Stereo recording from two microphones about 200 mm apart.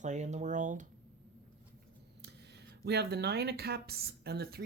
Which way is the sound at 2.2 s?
55° right (ahead or behind).